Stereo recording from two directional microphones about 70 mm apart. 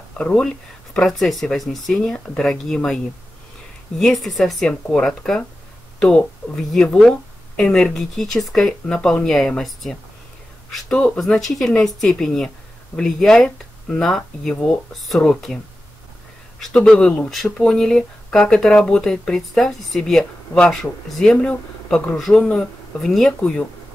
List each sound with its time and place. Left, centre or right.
0.2 s speech: centre
0.9 s speech: centre
4.0 s speech: centre
11.1 s speech: centre